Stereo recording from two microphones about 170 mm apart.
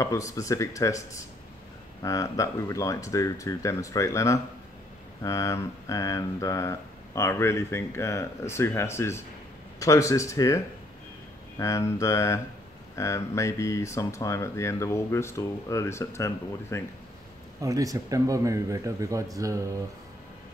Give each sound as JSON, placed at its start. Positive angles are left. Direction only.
{"t": 0.0, "sound": "speech", "side_deg": 20}
{"t": 17.6, "sound": "speech", "side_deg": -20}